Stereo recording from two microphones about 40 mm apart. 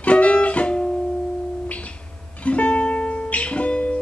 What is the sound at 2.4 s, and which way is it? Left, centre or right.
Music, left.